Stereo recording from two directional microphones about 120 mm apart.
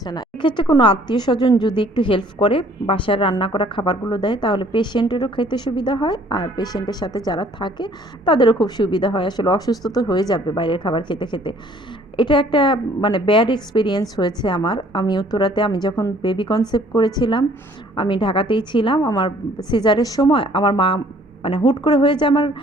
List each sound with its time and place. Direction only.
0.0 s a woman's voice: 35° left (ahead or behind)